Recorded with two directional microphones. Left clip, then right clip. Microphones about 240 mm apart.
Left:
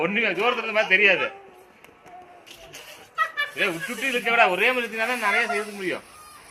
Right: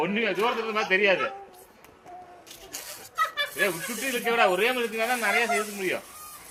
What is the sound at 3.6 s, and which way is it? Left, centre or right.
Speech, left.